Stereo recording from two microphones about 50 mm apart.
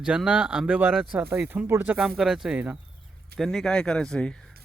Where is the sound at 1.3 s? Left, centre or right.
Right.